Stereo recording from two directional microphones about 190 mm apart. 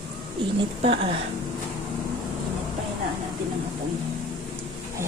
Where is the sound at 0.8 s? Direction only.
30° right (ahead or behind).